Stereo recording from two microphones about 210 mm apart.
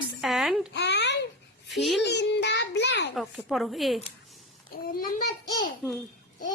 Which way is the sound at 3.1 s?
Centre (ahead or behind).